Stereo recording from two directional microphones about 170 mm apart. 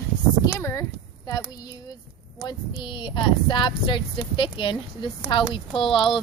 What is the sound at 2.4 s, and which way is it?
Speech, 30° left (ahead or behind).